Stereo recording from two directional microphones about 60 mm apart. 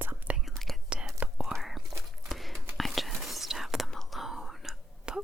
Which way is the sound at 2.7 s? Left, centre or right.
Centre.